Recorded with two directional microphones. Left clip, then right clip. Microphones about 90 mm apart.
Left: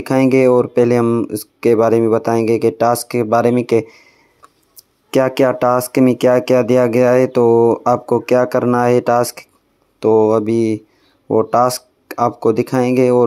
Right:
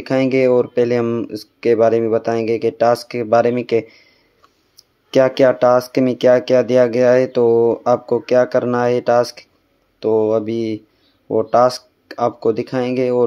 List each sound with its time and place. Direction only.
0.0 s speech: 40° left (ahead or behind)
1.0 s speech: 20° left (ahead or behind)
1.3 s speech: 45° left (ahead or behind)
5.1 s speech: 45° left (ahead or behind)